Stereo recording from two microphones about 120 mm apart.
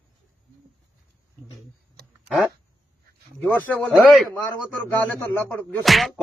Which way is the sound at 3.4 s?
15° left (ahead or behind).